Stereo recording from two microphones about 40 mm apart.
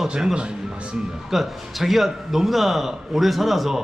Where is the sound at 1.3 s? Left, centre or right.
Centre.